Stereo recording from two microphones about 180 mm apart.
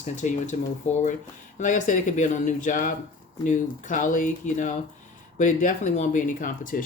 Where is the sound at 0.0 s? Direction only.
40° left (ahead or behind).